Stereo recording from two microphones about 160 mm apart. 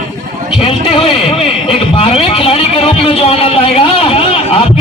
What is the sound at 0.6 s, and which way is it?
A man's voice, 35° left (ahead or behind).